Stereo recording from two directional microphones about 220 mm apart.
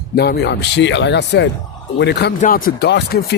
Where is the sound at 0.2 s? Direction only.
50° left (ahead or behind).